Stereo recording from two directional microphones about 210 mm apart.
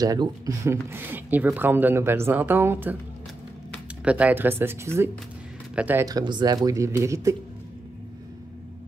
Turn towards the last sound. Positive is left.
turn(degrees=-15)  # may be behind; listen again after turning